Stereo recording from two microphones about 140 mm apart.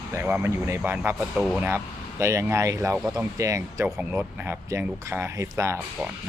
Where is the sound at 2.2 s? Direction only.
20° right (ahead or behind).